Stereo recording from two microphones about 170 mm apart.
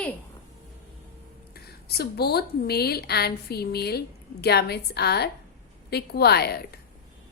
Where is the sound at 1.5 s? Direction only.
65° left (ahead or behind).